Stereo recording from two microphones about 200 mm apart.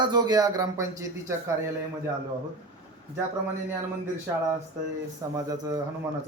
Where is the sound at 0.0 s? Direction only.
20° right (ahead or behind).